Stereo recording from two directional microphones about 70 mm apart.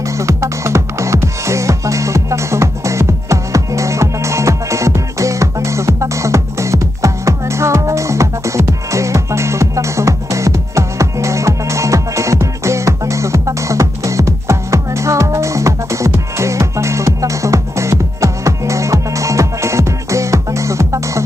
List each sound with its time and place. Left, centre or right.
0.2 s music: right